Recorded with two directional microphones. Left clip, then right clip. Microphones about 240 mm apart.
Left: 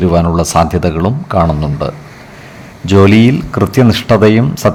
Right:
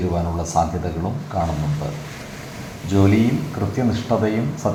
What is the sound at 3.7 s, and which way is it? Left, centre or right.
Speech, left.